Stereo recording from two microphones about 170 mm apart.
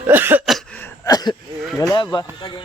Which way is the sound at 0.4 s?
Centre (ahead or behind).